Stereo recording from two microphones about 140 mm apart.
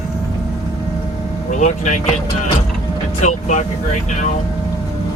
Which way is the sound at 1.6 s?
60° left (ahead or behind).